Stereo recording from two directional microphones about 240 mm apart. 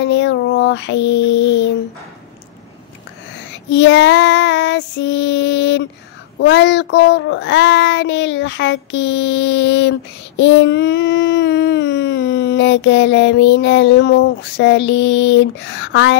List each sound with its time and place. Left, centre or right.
0.0 s child singing: left
3.7 s child singing: left